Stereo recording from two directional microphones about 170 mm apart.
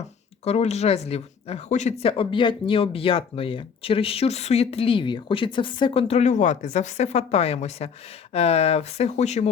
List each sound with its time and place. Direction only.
0.4 s speech: 40° left (ahead or behind)